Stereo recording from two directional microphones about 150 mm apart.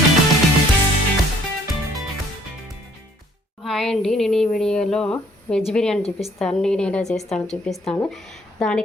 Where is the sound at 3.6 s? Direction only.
Centre (ahead or behind).